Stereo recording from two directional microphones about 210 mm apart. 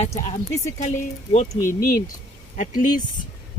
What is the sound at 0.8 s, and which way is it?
Speech, 35° left (ahead or behind).